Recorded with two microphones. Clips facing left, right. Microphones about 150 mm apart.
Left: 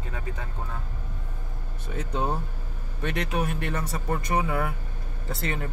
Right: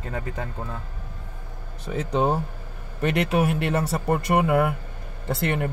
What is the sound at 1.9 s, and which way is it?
Speech, 90° right.